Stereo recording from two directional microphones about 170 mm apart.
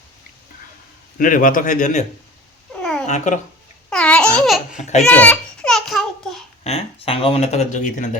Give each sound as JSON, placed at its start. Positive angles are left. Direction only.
{"t": 1.2, "sound": "a man's voice", "side_deg": 55}
{"t": 2.7, "sound": "cat", "side_deg": 5}
{"t": 3.1, "sound": "a man's voice", "side_deg": 45}
{"t": 3.8, "sound": "babbling", "side_deg": 5}
{"t": 5.0, "sound": "babbling", "side_deg": 10}
{"t": 6.7, "sound": "speech", "side_deg": 35}